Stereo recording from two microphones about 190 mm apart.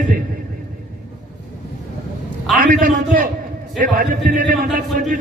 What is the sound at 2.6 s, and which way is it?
A man's voice, 45° right (ahead or behind).